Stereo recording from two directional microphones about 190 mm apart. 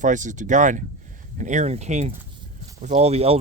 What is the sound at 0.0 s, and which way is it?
Speech, 40° right (ahead or behind).